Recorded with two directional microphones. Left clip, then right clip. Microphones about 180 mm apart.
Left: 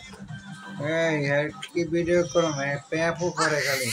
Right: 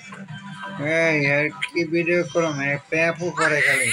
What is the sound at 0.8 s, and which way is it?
Speech, 20° right (ahead or behind).